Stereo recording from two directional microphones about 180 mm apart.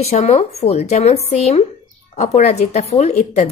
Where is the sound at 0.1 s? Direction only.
35° left (ahead or behind).